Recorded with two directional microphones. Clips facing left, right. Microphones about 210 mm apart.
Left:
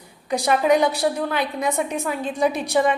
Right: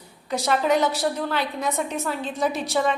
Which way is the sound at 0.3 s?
15° left (ahead or behind).